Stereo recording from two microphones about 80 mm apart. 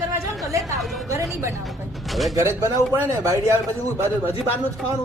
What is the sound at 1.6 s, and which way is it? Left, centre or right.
Speech, centre.